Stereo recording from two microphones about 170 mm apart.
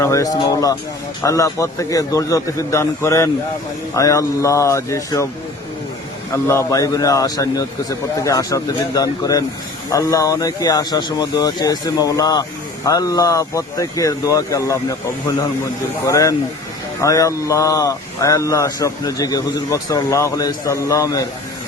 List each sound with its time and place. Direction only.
0.0 s a man's voice: 20° left (ahead or behind)
6.3 s speech: 15° left (ahead or behind)
16.0 s speech: 20° left (ahead or behind)